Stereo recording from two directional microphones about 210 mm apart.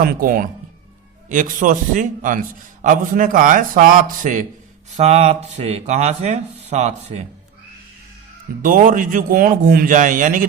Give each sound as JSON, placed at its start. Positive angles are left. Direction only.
{"t": 0.0, "sound": "speech", "side_deg": -40}
{"t": 8.6, "sound": "speech", "side_deg": -40}